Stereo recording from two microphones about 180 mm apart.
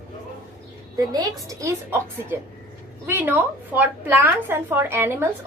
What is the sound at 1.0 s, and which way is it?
A woman's voice, 20° right (ahead or behind).